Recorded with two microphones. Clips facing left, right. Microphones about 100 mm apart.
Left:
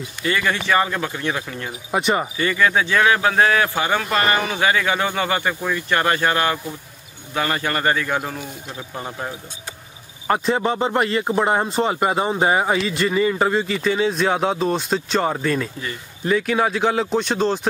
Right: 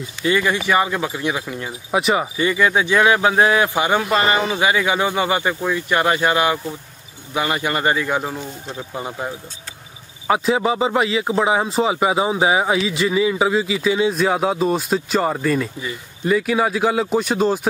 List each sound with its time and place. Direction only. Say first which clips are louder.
0.2 s a man's voice: right 3 dB; 15° right (ahead or behind)
2.3 s a man's voice: right 1 dB; 15° right (ahead or behind)